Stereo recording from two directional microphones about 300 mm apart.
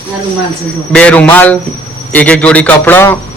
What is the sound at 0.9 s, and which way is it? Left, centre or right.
A man's voice, centre.